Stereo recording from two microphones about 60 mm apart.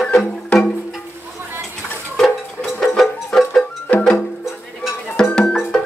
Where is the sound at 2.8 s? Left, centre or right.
Centre.